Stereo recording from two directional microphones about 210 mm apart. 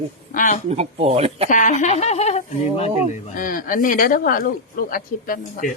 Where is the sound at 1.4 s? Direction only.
35° left (ahead or behind).